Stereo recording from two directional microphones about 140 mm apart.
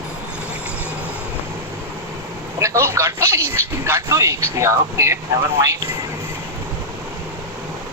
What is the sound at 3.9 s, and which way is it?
Speech, 20° right (ahead or behind).